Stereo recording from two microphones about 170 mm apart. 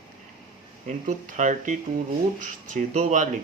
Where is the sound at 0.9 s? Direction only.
50° right (ahead or behind).